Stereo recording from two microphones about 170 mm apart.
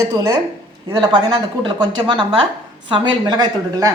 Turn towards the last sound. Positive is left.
turn(degrees=-20)  # may be behind; listen again after turning